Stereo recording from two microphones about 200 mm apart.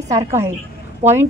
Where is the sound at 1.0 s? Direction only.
35° right (ahead or behind).